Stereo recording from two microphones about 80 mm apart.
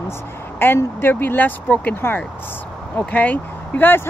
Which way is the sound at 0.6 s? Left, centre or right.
Left.